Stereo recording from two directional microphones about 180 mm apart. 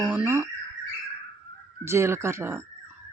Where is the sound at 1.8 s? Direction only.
15° right (ahead or behind).